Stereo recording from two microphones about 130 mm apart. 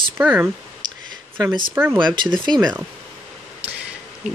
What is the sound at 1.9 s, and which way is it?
Speech, 35° right (ahead or behind).